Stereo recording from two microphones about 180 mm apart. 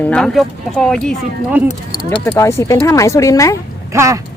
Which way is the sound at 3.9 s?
15° right (ahead or behind).